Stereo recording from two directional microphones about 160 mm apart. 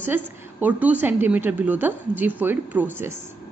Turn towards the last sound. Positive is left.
turn(degrees=-15)  # may be behind; listen again after turning